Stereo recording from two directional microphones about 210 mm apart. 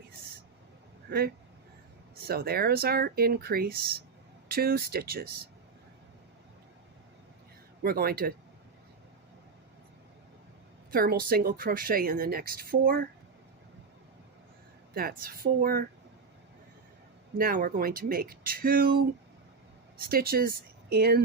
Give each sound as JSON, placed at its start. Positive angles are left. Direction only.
{"t": 2.2, "sound": "a woman's voice", "side_deg": -50}
{"t": 7.8, "sound": "a woman's voice", "side_deg": -45}
{"t": 10.9, "sound": "a woman's voice", "side_deg": -45}
{"t": 14.9, "sound": "a woman's voice", "side_deg": -45}
{"t": 17.3, "sound": "a woman's voice", "side_deg": -45}
{"t": 20.0, "sound": "speech", "side_deg": -45}